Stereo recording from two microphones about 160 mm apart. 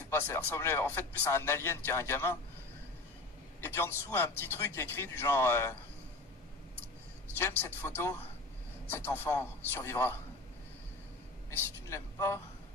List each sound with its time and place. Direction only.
0.1 s speech: 15° left (ahead or behind)
3.6 s speech: 15° left (ahead or behind)
7.3 s speech: 15° left (ahead or behind)
11.5 s speech: 15° left (ahead or behind)